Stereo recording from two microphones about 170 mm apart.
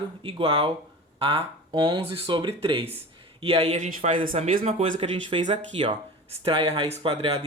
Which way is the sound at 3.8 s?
50° right (ahead or behind).